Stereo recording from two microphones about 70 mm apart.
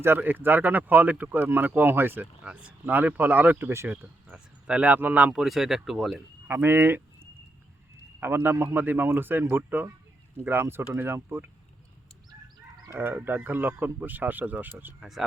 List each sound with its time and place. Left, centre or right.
0.0 s speech: right
2.4 s speech: centre
5.4 s speech: centre
6.5 s speech: right
12.9 s speech: right